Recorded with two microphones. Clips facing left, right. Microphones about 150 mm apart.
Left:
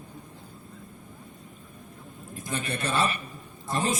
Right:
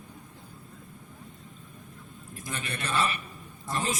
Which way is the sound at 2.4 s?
30° left (ahead or behind).